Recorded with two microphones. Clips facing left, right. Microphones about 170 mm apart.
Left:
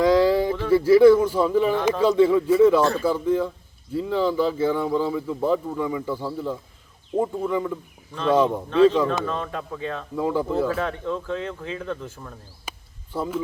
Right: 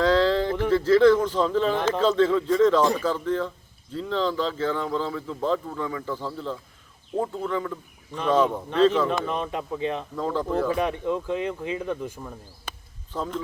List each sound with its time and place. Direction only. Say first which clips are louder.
0.0 s a sound: left 3 dB; 10° left (ahead or behind)
0.7 s speech: left 4 dB; 10° left (ahead or behind)
9.2 s speech: even; 20° right (ahead or behind)
10.2 s speech: left 4 dB; 10° left (ahead or behind)
10.7 s speech: right 1 dB; 15° right (ahead or behind)
12.7 s a sound: left 1 dB; 10° left (ahead or behind)
13.1 s speech: left 3 dB; 10° left (ahead or behind)